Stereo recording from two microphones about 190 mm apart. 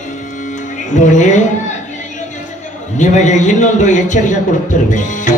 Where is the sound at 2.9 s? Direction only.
40° left (ahead or behind).